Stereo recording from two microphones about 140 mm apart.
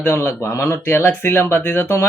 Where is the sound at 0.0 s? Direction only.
15° left (ahead or behind).